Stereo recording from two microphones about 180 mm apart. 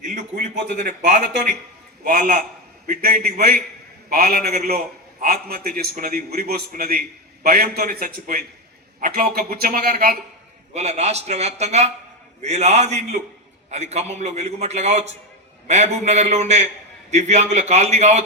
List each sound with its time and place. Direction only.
0.1 s a sound: 45° right (ahead or behind)
0.8 s a man's voice: 45° right (ahead or behind)
10.8 s a man's voice: 40° right (ahead or behind)